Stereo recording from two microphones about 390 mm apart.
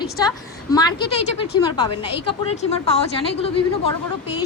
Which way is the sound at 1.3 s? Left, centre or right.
Left.